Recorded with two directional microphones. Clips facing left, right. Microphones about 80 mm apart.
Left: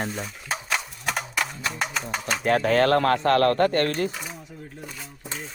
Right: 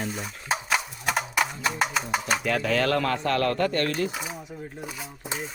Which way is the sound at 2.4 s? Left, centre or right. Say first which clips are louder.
Left 8 dB; left.